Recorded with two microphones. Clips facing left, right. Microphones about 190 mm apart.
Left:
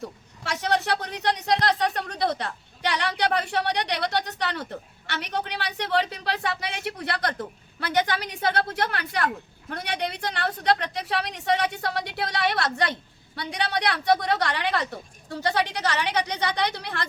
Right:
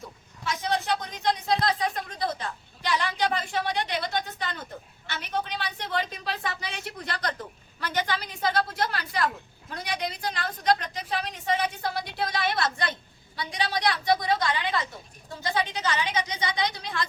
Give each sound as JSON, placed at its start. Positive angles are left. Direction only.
{"t": 0.4, "sound": "a woman's voice", "side_deg": 75}